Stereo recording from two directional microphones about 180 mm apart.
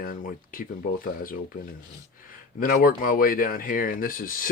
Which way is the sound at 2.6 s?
50° left (ahead or behind).